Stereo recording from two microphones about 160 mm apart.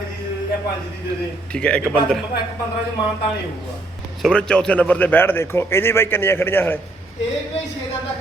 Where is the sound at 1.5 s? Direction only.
5° left (ahead or behind).